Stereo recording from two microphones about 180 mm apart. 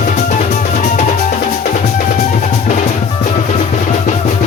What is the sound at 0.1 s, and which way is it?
Music, 45° left (ahead or behind).